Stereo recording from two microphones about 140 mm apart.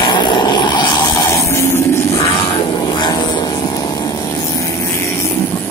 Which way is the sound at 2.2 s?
40° left (ahead or behind).